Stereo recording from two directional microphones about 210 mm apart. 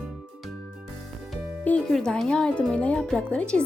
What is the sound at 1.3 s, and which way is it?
Music, 5° left (ahead or behind).